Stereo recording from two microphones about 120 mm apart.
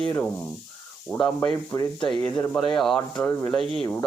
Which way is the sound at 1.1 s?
Centre (ahead or behind).